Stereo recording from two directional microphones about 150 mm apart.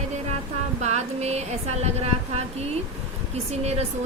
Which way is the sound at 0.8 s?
45° right (ahead or behind).